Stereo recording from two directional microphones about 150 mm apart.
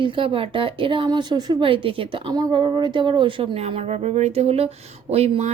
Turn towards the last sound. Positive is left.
turn(degrees=-45)  # may be behind; listen again after turning